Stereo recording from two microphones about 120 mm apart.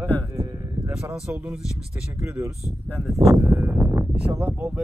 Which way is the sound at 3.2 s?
25° right (ahead or behind).